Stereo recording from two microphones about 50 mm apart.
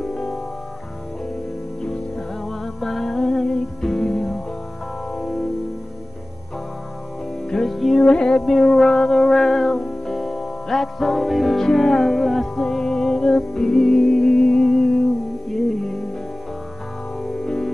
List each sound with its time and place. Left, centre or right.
0.0 s music: centre
1.8 s music: centre
2.4 s music: centre
7.4 s music: centre
8.0 s music: centre
17.2 s music: centre